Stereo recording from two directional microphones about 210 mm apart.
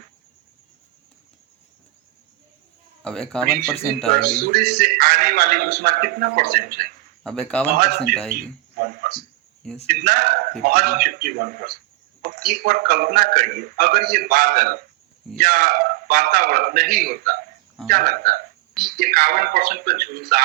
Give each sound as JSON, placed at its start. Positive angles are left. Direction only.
{"t": 3.0, "sound": "speech", "side_deg": 0}
{"t": 4.2, "sound": "a man's voice", "side_deg": -45}
{"t": 7.3, "sound": "speech", "side_deg": 5}
{"t": 7.8, "sound": "a man's voice", "side_deg": -45}
{"t": 8.4, "sound": "a sound", "side_deg": -45}
{"t": 9.8, "sound": "a man's voice", "side_deg": -45}